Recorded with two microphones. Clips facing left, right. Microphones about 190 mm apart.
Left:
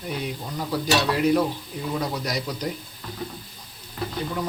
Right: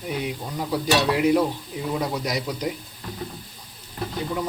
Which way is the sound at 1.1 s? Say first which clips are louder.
Right 1 dB; 15° right (ahead or behind).